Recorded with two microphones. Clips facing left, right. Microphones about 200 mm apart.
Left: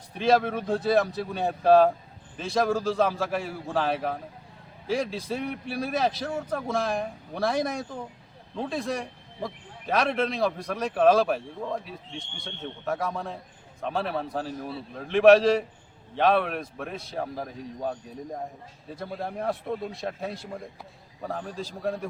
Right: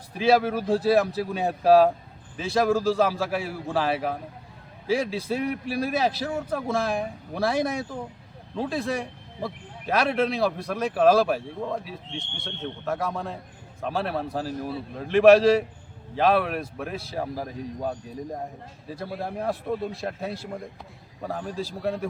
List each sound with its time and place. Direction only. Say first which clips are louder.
0.1 s a man's voice: right 2 dB; 5° right (ahead or behind)